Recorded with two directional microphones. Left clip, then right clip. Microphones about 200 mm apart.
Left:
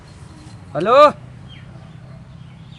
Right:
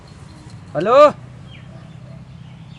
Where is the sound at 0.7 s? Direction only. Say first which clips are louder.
Even; centre (ahead or behind).